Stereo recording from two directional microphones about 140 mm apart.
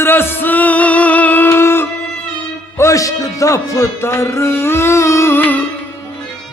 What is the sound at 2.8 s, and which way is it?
A man's voice, 20° left (ahead or behind).